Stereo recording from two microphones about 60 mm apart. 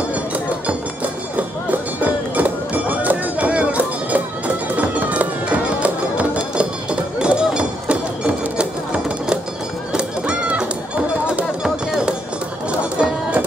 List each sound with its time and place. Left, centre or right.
2.3 s music: right
9.9 s goose: centre
11.3 s music: centre